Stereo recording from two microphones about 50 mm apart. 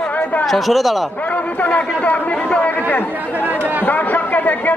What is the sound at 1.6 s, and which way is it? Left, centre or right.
Speech, left.